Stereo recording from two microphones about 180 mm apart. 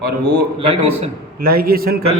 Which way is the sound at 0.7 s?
35° right (ahead or behind).